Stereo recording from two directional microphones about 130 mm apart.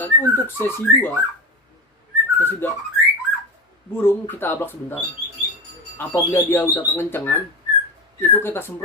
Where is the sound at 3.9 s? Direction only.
15° left (ahead or behind).